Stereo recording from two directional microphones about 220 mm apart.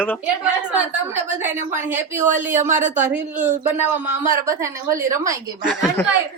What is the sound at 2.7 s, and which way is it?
Speech, 35° right (ahead or behind).